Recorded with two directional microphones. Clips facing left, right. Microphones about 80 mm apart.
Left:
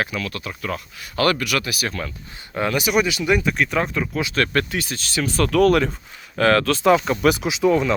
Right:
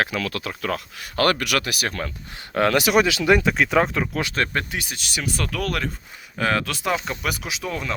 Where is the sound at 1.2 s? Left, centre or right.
Right.